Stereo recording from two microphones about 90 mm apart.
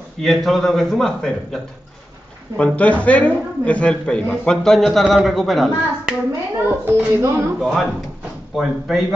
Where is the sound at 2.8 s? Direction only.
15° left (ahead or behind).